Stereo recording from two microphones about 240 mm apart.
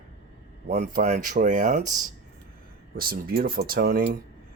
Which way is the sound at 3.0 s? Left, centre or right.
Right.